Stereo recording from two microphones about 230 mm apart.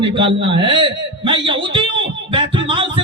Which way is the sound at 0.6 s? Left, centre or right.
Right.